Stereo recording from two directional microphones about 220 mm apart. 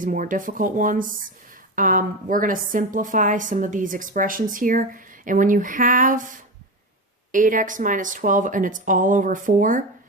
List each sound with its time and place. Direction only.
0.0 s a woman's voice: 35° right (ahead or behind)